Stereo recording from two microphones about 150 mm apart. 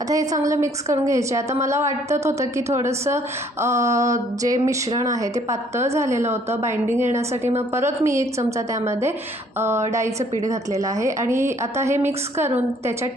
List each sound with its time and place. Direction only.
0.1 s a woman's voice: 20° right (ahead or behind)